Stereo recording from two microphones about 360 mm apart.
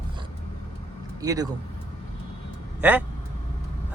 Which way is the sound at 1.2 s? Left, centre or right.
Centre.